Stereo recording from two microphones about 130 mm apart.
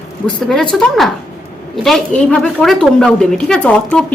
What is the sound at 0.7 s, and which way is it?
A woman's voice, centre (ahead or behind).